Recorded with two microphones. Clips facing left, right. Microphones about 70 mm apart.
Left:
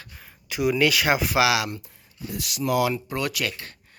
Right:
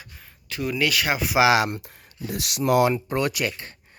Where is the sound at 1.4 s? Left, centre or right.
Right.